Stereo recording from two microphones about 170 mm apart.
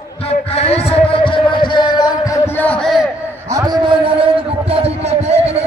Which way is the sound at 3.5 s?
20° right (ahead or behind).